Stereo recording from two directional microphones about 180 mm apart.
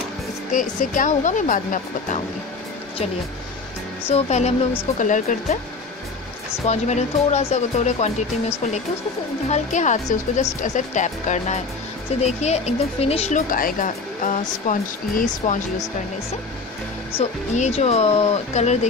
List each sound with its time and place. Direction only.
0.5 s speech: 45° left (ahead or behind)
4.1 s speech: 35° left (ahead or behind)
6.6 s speech: 40° left (ahead or behind)
13.5 s speech: 50° left (ahead or behind)
17.2 s speech: 35° left (ahead or behind)